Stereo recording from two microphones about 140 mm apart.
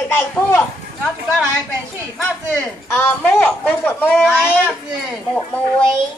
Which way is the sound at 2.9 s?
15° left (ahead or behind).